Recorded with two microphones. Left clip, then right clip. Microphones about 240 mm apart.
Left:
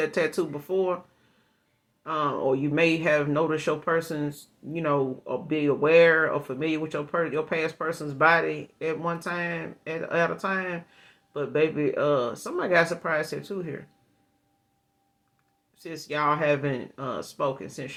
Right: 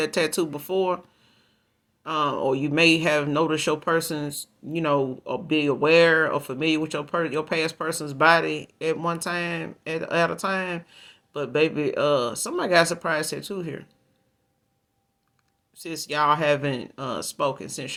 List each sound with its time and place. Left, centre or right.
0.0 s speech: right
2.0 s speech: right
15.7 s speech: right